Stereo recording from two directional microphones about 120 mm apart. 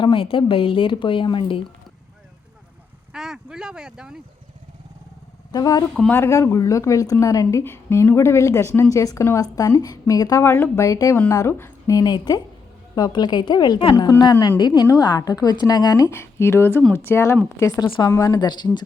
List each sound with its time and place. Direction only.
0.0 s speech: 45° left (ahead or behind)
3.1 s speech: 5° right (ahead or behind)
5.5 s a man's voice: 35° left (ahead or behind)
6.1 s a woman's voice: 20° left (ahead or behind)
11.9 s a woman's voice: 35° left (ahead or behind)
17.8 s speech: 45° left (ahead or behind)
18.1 s a woman's voice: 30° left (ahead or behind)